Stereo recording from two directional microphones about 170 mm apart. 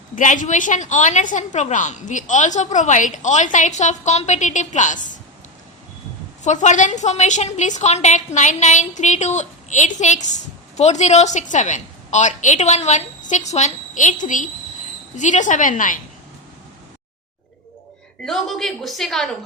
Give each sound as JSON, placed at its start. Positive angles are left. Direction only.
{"t": 0.2, "sound": "a woman's voice", "side_deg": 50}
{"t": 6.4, "sound": "a woman's voice", "side_deg": 45}
{"t": 18.2, "sound": "a woman's voice", "side_deg": 0}